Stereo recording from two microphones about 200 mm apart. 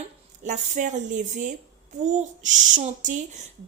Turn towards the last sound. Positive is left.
turn(degrees=-40)  # may be behind; listen again after turning